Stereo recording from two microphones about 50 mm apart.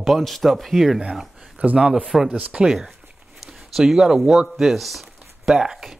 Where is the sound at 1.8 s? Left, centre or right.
Centre.